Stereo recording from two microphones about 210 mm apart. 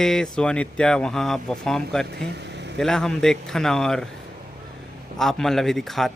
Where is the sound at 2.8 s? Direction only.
5° left (ahead or behind).